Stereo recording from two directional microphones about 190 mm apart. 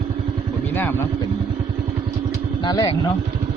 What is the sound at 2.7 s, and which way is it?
Speech, 20° left (ahead or behind).